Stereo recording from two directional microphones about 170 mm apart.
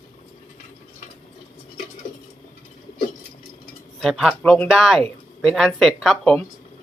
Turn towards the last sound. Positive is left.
turn(degrees=0)  # may be behind; listen again after turning